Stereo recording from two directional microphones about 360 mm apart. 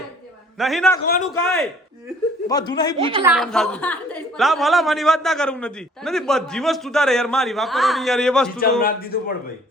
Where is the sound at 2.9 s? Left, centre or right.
Centre.